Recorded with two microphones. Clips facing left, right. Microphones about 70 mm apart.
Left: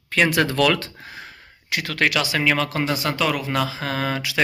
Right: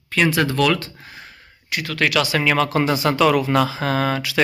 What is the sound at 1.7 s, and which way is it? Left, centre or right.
Speech, left.